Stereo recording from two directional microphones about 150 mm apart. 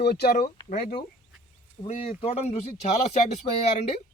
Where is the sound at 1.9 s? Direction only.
45° left (ahead or behind).